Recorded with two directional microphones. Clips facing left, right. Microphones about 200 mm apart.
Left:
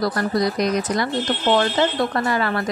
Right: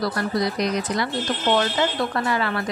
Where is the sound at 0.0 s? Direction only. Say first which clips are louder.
Left 3 dB; 45° left (ahead or behind).